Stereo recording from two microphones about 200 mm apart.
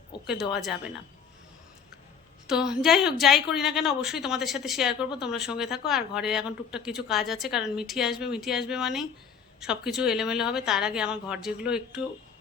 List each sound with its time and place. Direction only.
0.1 s a sound: 25° left (ahead or behind)
0.5 s a woman's voice: centre (ahead or behind)
2.5 s a woman's voice: 5° right (ahead or behind)